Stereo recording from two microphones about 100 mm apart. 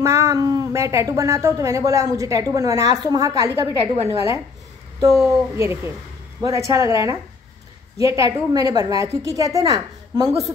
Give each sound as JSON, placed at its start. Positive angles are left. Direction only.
{"t": 0.0, "sound": "a woman's voice", "side_deg": -30}
{"t": 3.8, "sound": "a woman's voice", "side_deg": -75}
{"t": 4.1, "sound": "a woman's voice", "side_deg": -35}
{"t": 5.6, "sound": "a woman's voice", "side_deg": -25}